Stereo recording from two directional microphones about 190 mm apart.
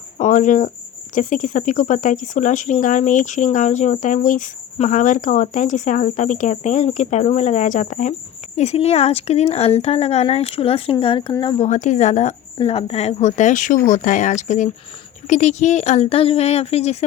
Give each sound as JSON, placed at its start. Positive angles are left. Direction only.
{"t": 0.2, "sound": "cricket", "side_deg": 40}
{"t": 1.1, "sound": "speech", "side_deg": 45}
{"t": 11.7, "sound": "speech", "side_deg": 40}